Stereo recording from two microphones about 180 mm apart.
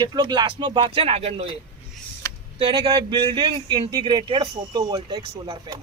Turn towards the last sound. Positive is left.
turn(degrees=-25)  # may be behind; listen again after turning